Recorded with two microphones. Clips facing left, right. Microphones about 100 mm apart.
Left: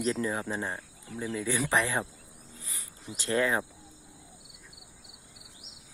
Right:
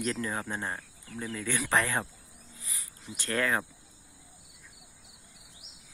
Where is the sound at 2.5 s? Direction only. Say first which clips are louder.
Left 1 dB; 35° left (ahead or behind).